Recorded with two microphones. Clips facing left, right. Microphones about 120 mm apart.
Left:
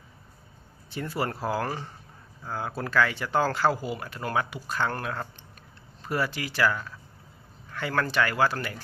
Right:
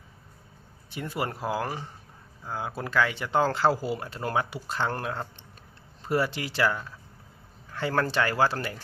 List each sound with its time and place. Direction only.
0.9 s speech: 20° right (ahead or behind)